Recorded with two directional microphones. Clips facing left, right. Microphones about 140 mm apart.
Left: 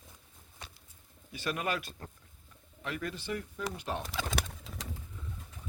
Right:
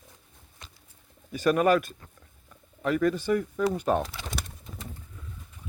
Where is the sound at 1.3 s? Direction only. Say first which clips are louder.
Right 12 dB; 45° right (ahead or behind).